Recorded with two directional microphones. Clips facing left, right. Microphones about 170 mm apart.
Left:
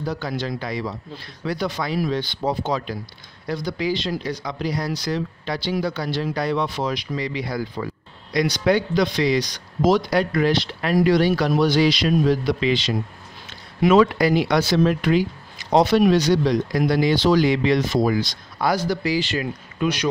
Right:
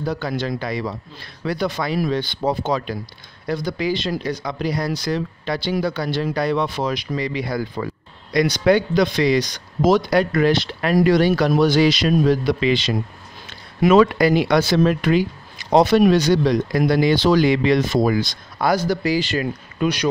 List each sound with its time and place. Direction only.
0.0 s a man's voice: 55° right (ahead or behind)